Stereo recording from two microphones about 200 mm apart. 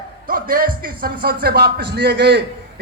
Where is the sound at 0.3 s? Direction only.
45° right (ahead or behind).